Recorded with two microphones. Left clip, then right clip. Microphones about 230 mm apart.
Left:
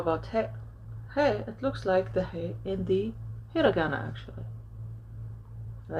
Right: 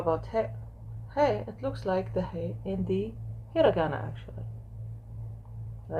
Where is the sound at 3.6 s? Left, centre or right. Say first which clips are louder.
Right 1 dB; left.